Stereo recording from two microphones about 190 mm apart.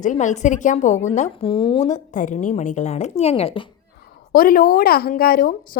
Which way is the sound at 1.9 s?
40° left (ahead or behind).